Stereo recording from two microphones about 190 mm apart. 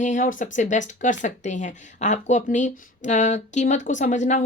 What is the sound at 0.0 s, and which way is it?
A woman's voice, 40° left (ahead or behind).